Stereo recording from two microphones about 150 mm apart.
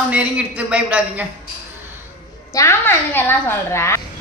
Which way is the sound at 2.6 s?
15° left (ahead or behind).